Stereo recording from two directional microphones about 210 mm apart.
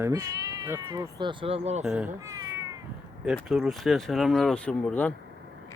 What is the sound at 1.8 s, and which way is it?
Speech, 5° right (ahead or behind).